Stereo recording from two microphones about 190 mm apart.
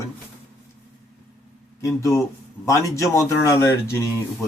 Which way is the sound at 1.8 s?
15° left (ahead or behind).